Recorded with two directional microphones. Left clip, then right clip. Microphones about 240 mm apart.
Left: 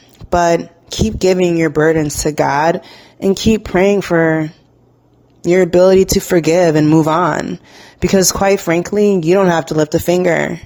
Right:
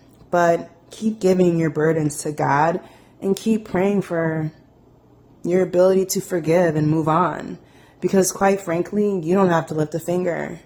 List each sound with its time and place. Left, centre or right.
0.3 s speech: left